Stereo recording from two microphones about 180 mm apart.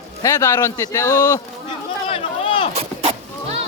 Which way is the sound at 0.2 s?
20° left (ahead or behind).